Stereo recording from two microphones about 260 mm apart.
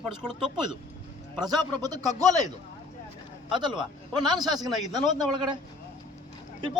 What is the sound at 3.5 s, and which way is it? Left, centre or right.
Speech, centre.